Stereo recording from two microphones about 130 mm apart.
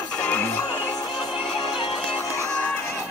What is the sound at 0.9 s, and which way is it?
Music, 30° left (ahead or behind).